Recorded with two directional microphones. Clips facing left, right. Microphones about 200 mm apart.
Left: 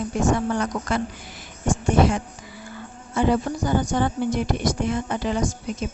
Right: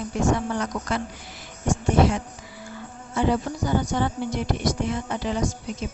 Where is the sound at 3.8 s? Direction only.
50° left (ahead or behind).